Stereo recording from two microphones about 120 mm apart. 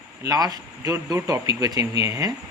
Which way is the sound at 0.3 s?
30° right (ahead or behind).